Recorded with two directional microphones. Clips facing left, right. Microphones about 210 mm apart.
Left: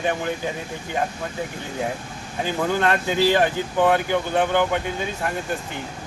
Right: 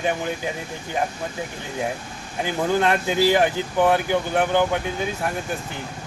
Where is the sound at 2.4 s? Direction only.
15° right (ahead or behind).